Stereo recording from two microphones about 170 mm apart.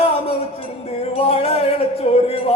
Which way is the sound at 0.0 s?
35° left (ahead or behind).